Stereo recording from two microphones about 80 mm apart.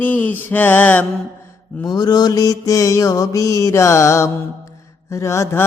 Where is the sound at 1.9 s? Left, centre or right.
Left.